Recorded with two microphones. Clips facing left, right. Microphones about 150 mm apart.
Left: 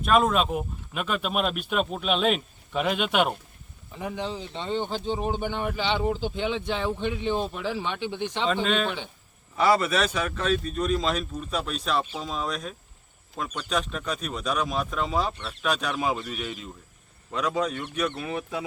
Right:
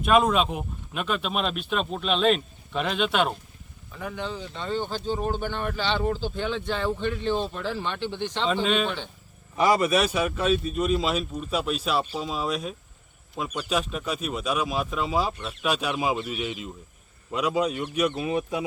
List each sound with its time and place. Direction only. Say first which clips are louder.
0.0 s speech: right 1 dB; centre (ahead or behind)
3.9 s speech: left 1 dB; 25° left (ahead or behind); by 9.0 s centre (ahead or behind)
9.6 s speech: right 1 dB; 15° right (ahead or behind)